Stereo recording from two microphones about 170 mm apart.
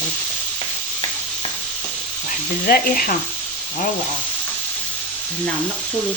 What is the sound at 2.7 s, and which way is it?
Speech, 60° left (ahead or behind).